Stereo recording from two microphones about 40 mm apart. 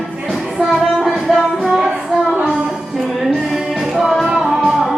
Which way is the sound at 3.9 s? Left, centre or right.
Centre.